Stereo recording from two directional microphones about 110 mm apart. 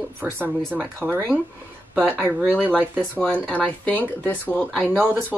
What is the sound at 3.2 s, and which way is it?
Speech, 10° left (ahead or behind).